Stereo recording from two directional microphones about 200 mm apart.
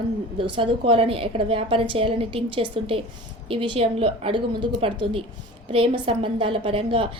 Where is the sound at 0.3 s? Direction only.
25° right (ahead or behind).